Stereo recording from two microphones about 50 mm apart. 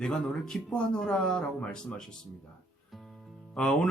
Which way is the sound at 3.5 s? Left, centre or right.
Centre.